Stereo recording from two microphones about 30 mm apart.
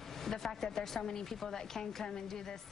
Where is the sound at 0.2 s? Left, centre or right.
Centre.